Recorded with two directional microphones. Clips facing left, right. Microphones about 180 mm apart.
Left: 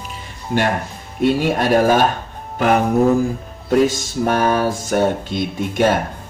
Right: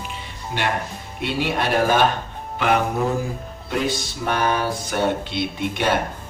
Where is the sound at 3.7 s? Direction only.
45° left (ahead or behind).